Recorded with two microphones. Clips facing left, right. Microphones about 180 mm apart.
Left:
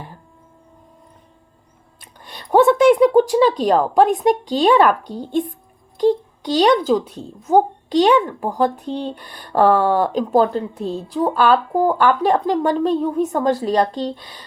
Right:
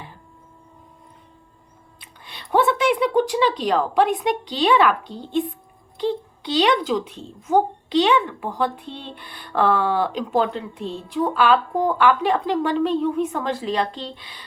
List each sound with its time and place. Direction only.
2.0 s speech: 45° left (ahead or behind)